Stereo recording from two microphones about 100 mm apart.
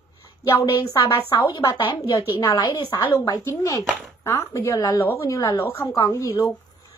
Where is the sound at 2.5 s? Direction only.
40° left (ahead or behind).